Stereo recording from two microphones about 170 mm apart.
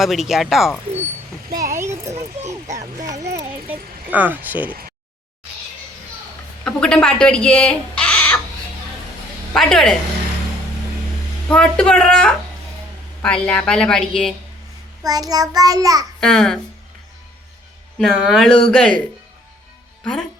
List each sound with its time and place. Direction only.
0.0 s a woman's voice: centre (ahead or behind)
1.5 s a sound: 15° right (ahead or behind)
6.7 s speech: 5° left (ahead or behind)
9.5 s a woman's voice: 5° left (ahead or behind)
11.4 s a woman's voice: 5° left (ahead or behind)
15.0 s child singing: 20° right (ahead or behind)
16.2 s a woman's voice: centre (ahead or behind)
18.0 s a woman's voice: centre (ahead or behind)